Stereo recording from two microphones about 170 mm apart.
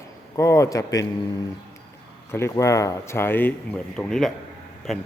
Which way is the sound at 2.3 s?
15° left (ahead or behind).